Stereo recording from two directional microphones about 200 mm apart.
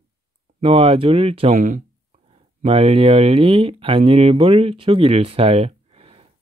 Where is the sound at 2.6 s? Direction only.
30° right (ahead or behind).